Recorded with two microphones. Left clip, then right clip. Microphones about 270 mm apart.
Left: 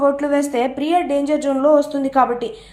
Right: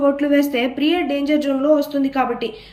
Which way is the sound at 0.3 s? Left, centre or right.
Centre.